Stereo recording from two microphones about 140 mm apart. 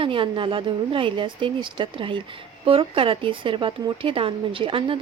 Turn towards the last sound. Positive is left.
turn(degrees=-40)  # may be behind; listen again after turning